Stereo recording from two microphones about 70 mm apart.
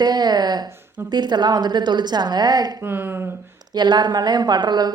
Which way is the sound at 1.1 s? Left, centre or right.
Right.